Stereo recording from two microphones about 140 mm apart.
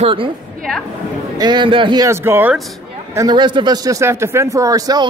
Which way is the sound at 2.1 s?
15° right (ahead or behind).